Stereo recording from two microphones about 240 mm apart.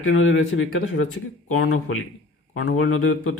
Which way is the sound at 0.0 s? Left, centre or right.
Left.